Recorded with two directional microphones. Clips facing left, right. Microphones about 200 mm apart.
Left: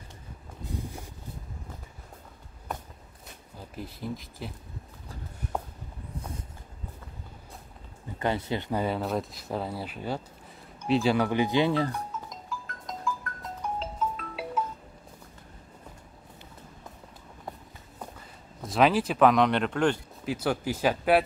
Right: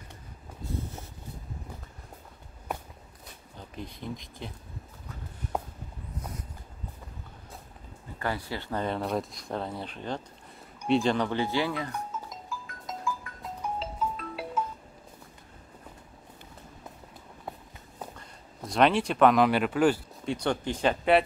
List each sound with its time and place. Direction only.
3.5 s speech: 5° left (ahead or behind)
8.2 s speech: 20° left (ahead or behind)
8.8 s speech: centre (ahead or behind); by 11.7 s 15° left (ahead or behind)
11.7 s speech: 30° left (ahead or behind)
12.3 s music: 5° right (ahead or behind)
18.7 s speech: centre (ahead or behind)
20.2 s speech: 5° left (ahead or behind)